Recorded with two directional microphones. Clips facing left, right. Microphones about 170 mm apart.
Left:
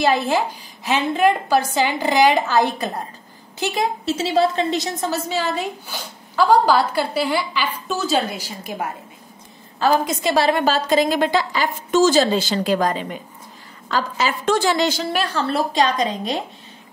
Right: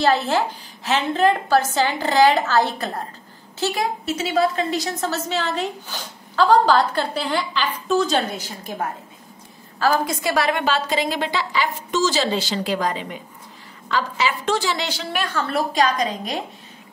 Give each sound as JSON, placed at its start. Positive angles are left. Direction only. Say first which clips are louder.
{"t": 0.0, "sound": "a woman's voice", "louder": "even", "side_deg": 15}
{"t": 4.0, "sound": "a woman's voice", "louder": "left 2 dB", "side_deg": 30}
{"t": 9.8, "sound": "a woman's voice", "louder": "left 2 dB", "side_deg": 20}
{"t": 15.3, "sound": "a woman's voice", "louder": "even", "side_deg": 25}